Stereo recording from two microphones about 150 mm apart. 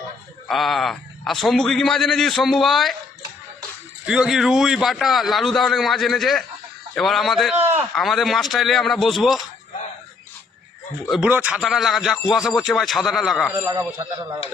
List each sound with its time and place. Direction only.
0.4 s a man's voice: centre (ahead or behind)
4.0 s a man's voice: 5° right (ahead or behind)
7.6 s speech: 15° right (ahead or behind)
7.9 s a man's voice: centre (ahead or behind)
11.1 s a man's voice: 10° right (ahead or behind)
13.7 s speech: 20° right (ahead or behind)